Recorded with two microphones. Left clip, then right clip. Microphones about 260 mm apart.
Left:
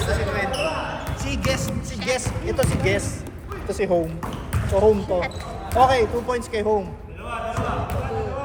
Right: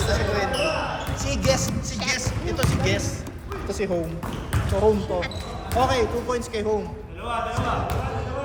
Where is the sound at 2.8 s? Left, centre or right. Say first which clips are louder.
Left 2 dB; left.